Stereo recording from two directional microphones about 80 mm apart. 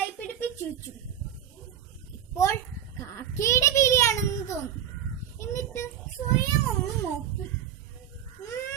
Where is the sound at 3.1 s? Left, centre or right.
Left.